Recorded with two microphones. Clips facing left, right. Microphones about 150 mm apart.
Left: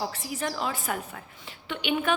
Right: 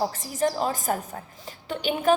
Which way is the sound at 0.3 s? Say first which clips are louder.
Right 7 dB; 40° right (ahead or behind).